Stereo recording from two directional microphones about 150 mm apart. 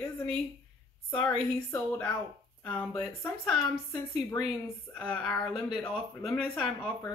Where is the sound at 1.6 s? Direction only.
10° left (ahead or behind).